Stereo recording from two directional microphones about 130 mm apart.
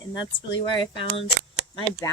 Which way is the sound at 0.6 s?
45° left (ahead or behind).